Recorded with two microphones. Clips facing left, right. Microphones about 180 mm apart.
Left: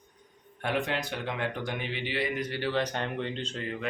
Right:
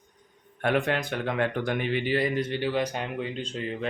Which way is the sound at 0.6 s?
55° right (ahead or behind).